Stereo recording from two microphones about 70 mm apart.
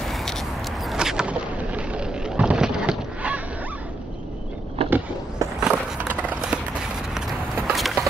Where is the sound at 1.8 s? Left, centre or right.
Centre.